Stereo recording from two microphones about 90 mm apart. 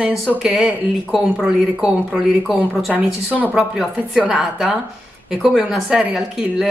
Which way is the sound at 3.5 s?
5° right (ahead or behind).